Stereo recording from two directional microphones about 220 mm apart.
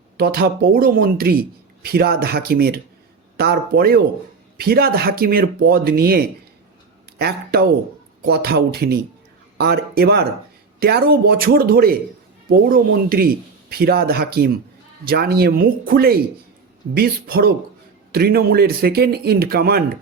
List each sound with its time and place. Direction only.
0.2 s speech: 45° right (ahead or behind)